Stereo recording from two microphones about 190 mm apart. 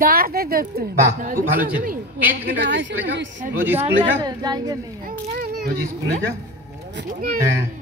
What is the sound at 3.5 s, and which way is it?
Speech, 10° right (ahead or behind).